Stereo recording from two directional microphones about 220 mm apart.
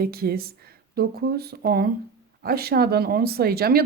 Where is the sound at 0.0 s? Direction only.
45° right (ahead or behind).